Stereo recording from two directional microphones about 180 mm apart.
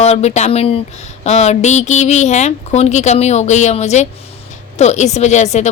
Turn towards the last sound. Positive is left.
turn(degrees=40)  # may be behind; listen again after turning